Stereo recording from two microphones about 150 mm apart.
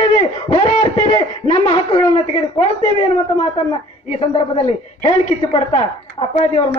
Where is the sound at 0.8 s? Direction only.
35° left (ahead or behind).